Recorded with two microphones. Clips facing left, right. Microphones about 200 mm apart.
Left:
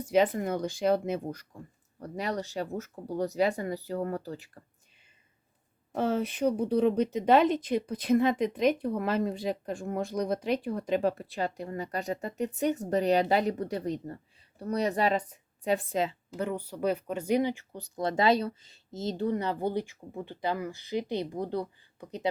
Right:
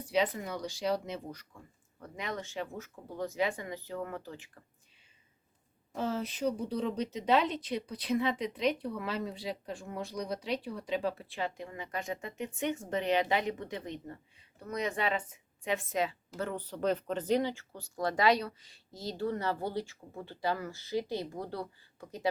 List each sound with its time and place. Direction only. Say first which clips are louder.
0.0 s speech: left 6 dB; 50° left (ahead or behind)
2.0 s speech: left 6 dB; 40° left (ahead or behind)
5.9 s a woman's voice: left 6 dB; 60° left (ahead or behind); by 16.1 s 30° left (ahead or behind)
16.4 s speech: left 3 dB; 10° left (ahead or behind)